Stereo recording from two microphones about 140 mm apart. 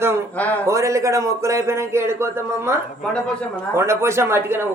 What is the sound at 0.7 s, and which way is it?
Speech, 20° right (ahead or behind).